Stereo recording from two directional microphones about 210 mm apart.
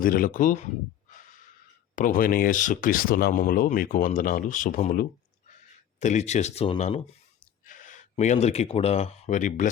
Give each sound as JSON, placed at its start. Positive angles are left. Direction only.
{"t": 0.0, "sound": "speech", "side_deg": 40}
{"t": 1.1, "sound": "gasp", "side_deg": 40}
{"t": 2.0, "sound": "speech", "side_deg": 40}
{"t": 7.7, "sound": "a sound", "side_deg": 40}
{"t": 8.1, "sound": "speech", "side_deg": 30}